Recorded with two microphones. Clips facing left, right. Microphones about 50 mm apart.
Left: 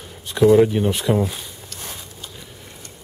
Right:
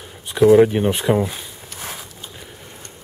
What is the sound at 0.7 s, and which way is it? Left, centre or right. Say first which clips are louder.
Zipper: right 2 dB; right.